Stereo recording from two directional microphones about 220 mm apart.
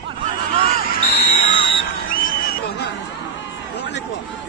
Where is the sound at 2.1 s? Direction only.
40° left (ahead or behind).